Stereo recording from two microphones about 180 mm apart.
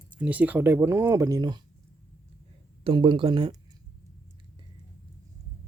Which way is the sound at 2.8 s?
30° right (ahead or behind).